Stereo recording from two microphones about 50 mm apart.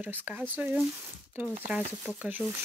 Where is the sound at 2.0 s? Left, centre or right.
Right.